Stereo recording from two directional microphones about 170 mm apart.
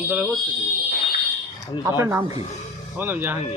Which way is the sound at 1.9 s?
15° right (ahead or behind).